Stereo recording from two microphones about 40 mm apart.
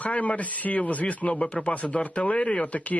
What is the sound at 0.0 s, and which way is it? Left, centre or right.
Speech, left.